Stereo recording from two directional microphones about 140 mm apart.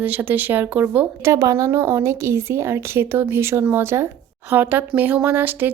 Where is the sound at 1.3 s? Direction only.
20° right (ahead or behind).